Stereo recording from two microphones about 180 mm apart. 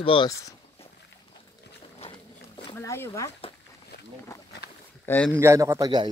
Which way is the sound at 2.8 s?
15° left (ahead or behind).